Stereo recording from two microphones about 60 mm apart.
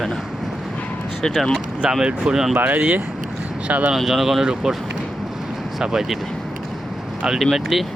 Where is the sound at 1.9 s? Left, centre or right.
Centre.